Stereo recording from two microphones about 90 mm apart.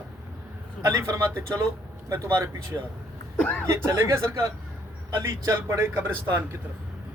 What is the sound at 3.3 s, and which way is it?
Speech, 15° left (ahead or behind).